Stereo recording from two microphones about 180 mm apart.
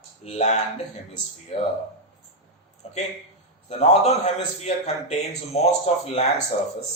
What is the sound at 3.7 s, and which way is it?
A man's voice, 40° left (ahead or behind).